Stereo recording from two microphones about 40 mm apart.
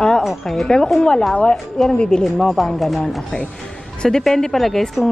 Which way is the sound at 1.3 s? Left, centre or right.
Left.